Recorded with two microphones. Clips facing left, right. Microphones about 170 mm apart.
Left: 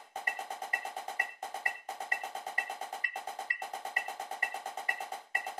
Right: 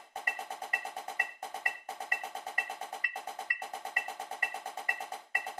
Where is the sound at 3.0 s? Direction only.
25° left (ahead or behind).